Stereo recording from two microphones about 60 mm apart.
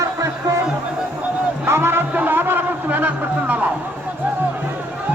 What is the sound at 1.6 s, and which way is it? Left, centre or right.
Music, right.